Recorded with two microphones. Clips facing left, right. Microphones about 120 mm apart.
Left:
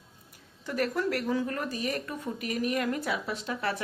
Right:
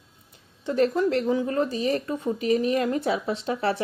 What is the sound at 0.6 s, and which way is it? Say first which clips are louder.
Speech: right 7 dB; 25° right (ahead or behind).